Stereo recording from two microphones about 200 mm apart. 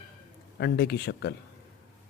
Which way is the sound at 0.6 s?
55° left (ahead or behind).